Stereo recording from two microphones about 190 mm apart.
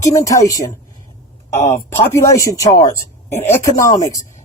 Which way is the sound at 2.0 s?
15° left (ahead or behind).